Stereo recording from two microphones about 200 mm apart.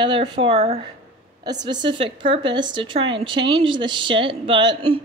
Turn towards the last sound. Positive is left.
turn(degrees=-25)  # may be behind; listen again after turning